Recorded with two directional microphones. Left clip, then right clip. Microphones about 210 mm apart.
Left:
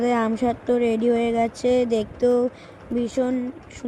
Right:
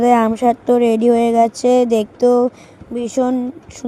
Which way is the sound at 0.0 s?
40° right (ahead or behind).